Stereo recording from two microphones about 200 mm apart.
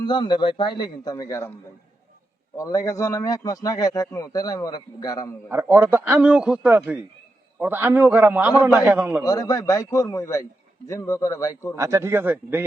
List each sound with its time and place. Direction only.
0.0 s a man's voice: 20° left (ahead or behind)
2.6 s a man's voice: 15° left (ahead or behind)
5.5 s a man's voice: 10° right (ahead or behind)
9.2 s a man's voice: 15° left (ahead or behind)
11.8 s a man's voice: 15° right (ahead or behind)